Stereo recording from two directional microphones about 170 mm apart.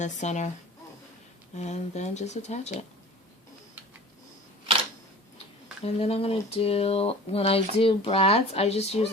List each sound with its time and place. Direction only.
0.0 s speech: 45° left (ahead or behind)
1.5 s speech: 40° left (ahead or behind)
5.8 s speech: 35° left (ahead or behind)